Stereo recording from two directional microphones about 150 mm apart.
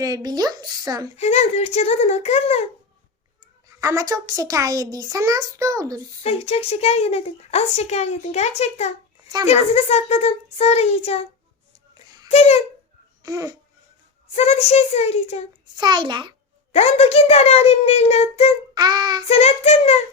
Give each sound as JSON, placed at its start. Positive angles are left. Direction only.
{"t": 0.0, "sound": "a child's voice", "side_deg": -25}
{"t": 1.1, "sound": "a woman's voice", "side_deg": 45}
{"t": 3.8, "sound": "a child's voice", "side_deg": -20}
{"t": 6.2, "sound": "a woman's voice", "side_deg": 40}
{"t": 9.2, "sound": "speech", "side_deg": -25}
{"t": 9.5, "sound": "a woman's voice", "side_deg": 45}
{"t": 12.3, "sound": "a woman's voice", "side_deg": 45}
{"t": 13.2, "sound": "a child's voice", "side_deg": -25}
{"t": 14.3, "sound": "a woman's voice", "side_deg": 45}
{"t": 15.7, "sound": "a child's voice", "side_deg": -30}
{"t": 16.7, "sound": "a woman's voice", "side_deg": 45}
{"t": 18.7, "sound": "a child's voice", "side_deg": -25}
{"t": 19.3, "sound": "a woman's voice", "side_deg": 45}